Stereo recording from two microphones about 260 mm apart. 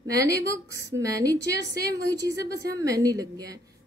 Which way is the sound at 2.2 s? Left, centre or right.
Left.